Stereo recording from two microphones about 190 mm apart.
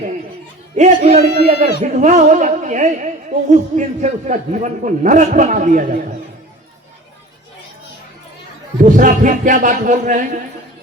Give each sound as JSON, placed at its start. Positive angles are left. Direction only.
{"t": 0.8, "sound": "a man's voice", "side_deg": -40}
{"t": 8.8, "sound": "music", "side_deg": -45}